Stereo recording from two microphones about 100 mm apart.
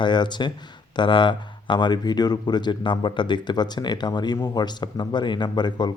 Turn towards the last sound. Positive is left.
turn(degrees=45)  # may be behind; listen again after turning